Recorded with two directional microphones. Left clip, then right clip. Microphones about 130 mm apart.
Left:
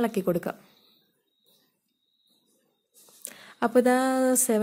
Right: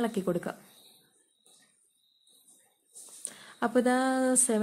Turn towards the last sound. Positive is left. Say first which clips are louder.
# left 4 dB
turn(degrees=30)  # may be behind; listen again after turning